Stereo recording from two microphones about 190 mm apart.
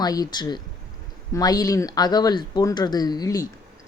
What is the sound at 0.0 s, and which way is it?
A woman's voice, 20° left (ahead or behind).